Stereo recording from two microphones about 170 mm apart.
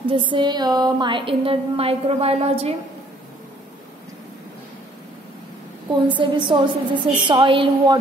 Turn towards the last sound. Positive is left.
turn(degrees=-30)  # may be behind; listen again after turning